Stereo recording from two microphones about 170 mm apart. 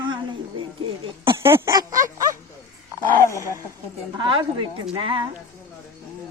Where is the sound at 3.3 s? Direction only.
15° right (ahead or behind).